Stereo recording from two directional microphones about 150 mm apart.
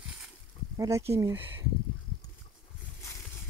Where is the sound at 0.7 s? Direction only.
20° right (ahead or behind).